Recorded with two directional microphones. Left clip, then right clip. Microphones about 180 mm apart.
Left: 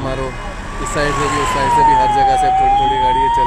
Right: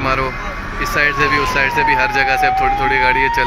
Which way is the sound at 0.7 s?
35° left (ahead or behind).